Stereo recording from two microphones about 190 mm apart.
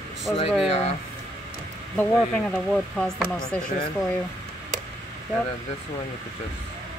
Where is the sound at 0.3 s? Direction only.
5° left (ahead or behind).